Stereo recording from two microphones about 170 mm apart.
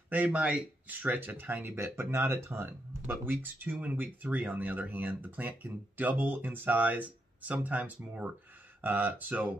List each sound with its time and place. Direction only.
0.1 s speech: 10° right (ahead or behind)